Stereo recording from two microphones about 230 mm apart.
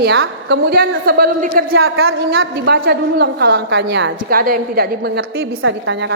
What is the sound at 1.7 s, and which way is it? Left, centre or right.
Speech, right.